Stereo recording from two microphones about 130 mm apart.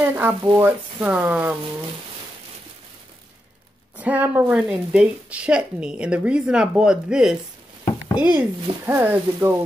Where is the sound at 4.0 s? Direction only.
10° right (ahead or behind).